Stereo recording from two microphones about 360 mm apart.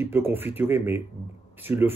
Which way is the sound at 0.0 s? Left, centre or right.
Centre.